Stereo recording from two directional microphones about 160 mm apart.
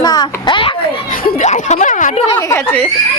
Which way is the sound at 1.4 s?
45° left (ahead or behind).